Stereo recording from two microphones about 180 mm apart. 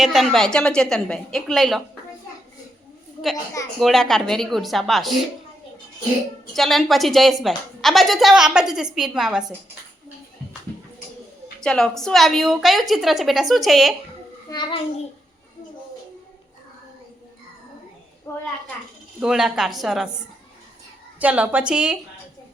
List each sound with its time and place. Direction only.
0.0 s a woman's voice: centre (ahead or behind)
3.8 s a woman's voice: centre (ahead or behind)
6.5 s a woman's voice: centre (ahead or behind)
11.6 s a woman's voice: 5° left (ahead or behind)
14.5 s a child's voice: 25° left (ahead or behind)
18.3 s a woman's voice: 15° left (ahead or behind)
19.2 s a woman's voice: 5° right (ahead or behind)
21.2 s a woman's voice: 10° right (ahead or behind)